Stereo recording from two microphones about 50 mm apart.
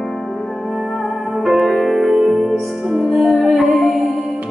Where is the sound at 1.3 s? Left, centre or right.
Centre.